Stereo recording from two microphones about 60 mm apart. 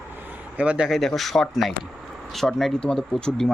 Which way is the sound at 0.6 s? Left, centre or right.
Right.